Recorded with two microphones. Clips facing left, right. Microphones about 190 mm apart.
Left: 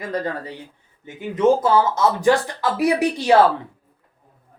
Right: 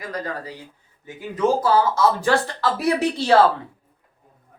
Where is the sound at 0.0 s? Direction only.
25° left (ahead or behind).